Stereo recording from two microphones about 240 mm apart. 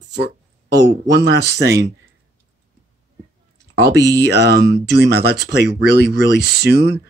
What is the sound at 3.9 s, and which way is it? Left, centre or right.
Speech, centre.